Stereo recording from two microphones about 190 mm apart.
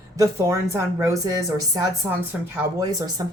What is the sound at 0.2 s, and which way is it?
A woman's voice, 15° right (ahead or behind).